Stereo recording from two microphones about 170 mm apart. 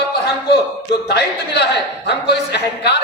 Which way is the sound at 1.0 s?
80° left.